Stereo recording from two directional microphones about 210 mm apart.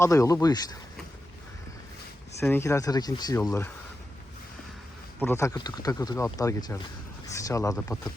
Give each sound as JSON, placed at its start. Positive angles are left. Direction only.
{"t": 0.0, "sound": "speech", "side_deg": 15}
{"t": 2.4, "sound": "speech", "side_deg": 10}
{"t": 5.2, "sound": "speech", "side_deg": 10}